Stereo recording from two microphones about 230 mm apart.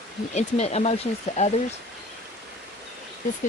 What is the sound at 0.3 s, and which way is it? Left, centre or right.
Speech, left.